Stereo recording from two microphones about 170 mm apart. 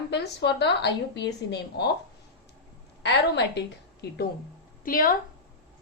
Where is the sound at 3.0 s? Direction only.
85° left.